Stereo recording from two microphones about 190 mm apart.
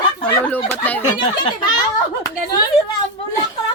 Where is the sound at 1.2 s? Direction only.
20° left (ahead or behind).